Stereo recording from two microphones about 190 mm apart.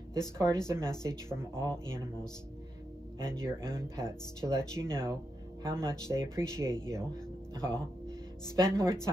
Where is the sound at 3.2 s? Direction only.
15° right (ahead or behind).